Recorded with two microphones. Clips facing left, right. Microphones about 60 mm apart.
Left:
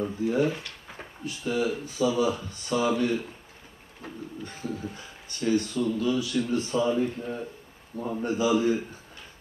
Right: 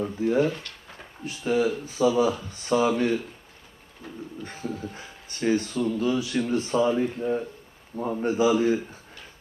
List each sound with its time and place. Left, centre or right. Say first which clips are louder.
0.2 s speech: right 3 dB; right
0.5 s speech: even; centre
1.2 s speech: right 4 dB; right
4.5 s speech: right 1 dB; right
6.9 s a man's voice: right 3 dB; centre
8.2 s speech: right 3 dB; right